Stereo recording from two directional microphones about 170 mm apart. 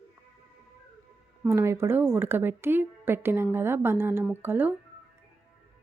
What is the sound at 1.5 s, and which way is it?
Speech, 15° right (ahead or behind).